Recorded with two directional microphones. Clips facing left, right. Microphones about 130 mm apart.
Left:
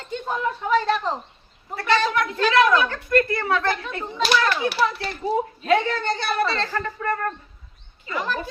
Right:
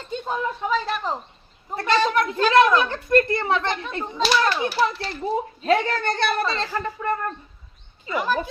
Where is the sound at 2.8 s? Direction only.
25° right (ahead or behind).